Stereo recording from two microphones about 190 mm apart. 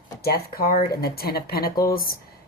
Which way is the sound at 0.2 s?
55° left (ahead or behind).